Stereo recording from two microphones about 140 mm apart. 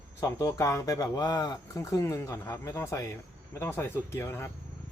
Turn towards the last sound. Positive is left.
turn(degrees=20)  # may be behind; listen again after turning